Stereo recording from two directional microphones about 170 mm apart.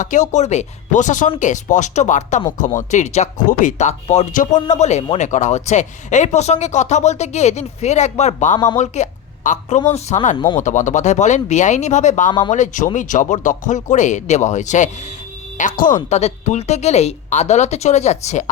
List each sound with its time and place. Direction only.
0.0 s speech: 45° left (ahead or behind)
8.5 s speech: 25° left (ahead or behind)
8.8 s speech: 45° left (ahead or behind)
10.6 s speech: 45° left (ahead or behind)